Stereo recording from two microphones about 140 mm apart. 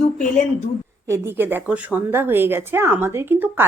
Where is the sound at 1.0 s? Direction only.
20° right (ahead or behind).